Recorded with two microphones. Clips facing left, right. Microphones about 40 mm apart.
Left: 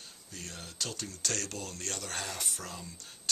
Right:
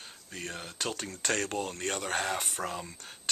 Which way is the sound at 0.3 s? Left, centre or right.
Right.